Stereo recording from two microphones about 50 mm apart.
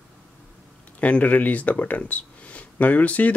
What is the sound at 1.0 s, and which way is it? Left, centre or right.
Speech, left.